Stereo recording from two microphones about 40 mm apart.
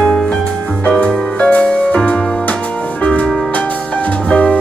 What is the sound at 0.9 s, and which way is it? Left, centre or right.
Music, left.